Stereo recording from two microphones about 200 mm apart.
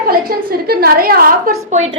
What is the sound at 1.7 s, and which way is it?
Speech, 30° right (ahead or behind).